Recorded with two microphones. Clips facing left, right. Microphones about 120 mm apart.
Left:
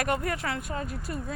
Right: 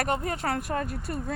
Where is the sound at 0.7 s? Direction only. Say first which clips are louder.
Right 3 dB; 55° right (ahead or behind).